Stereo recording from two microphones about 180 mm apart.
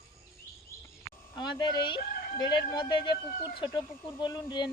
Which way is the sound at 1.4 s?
25° left (ahead or behind).